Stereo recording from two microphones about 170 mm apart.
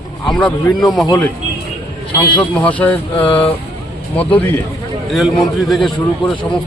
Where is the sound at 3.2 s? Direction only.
30° left (ahead or behind).